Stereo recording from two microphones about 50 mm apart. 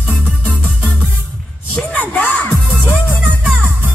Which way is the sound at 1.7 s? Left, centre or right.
Left.